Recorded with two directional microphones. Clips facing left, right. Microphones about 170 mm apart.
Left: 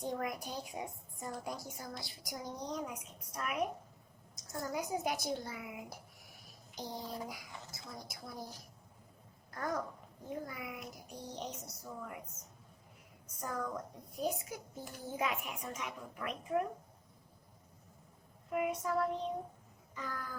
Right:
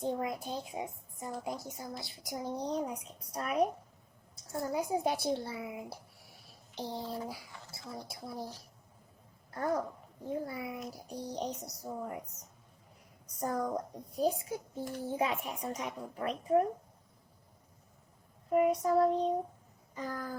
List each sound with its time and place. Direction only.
0.0 s speech: 25° right (ahead or behind)
9.5 s a child's voice: 30° right (ahead or behind)
13.4 s a child's voice: 35° right (ahead or behind)
18.5 s a child's voice: 35° right (ahead or behind)
19.9 s a sound: 35° right (ahead or behind)